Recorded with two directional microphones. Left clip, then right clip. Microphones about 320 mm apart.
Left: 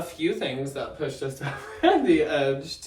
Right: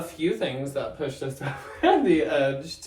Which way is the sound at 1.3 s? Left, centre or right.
Centre.